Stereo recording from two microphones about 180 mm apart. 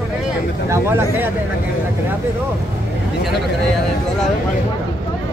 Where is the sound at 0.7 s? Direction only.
15° right (ahead or behind).